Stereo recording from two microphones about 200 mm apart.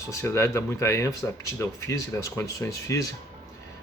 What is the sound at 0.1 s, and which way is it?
Speech, 15° left (ahead or behind).